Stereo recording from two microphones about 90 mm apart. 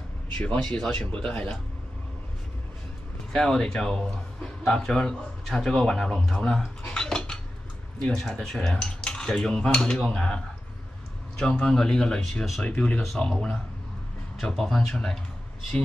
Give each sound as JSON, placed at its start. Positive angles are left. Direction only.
{"t": 0.4, "sound": "cutlery", "side_deg": 10}
{"t": 3.3, "sound": "a man's voice", "side_deg": 5}
{"t": 8.0, "sound": "cutlery", "side_deg": 5}
{"t": 14.4, "sound": "speech", "side_deg": 5}